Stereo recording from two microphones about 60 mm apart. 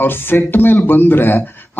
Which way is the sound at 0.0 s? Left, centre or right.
Left.